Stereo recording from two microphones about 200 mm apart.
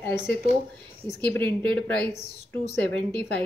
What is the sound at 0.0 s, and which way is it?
A woman's voice, 10° left (ahead or behind).